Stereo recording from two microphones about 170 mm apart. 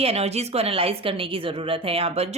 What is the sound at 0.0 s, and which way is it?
A woman's voice, 35° right (ahead or behind).